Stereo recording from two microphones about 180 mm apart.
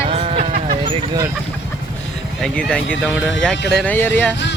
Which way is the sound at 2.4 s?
5° left (ahead or behind).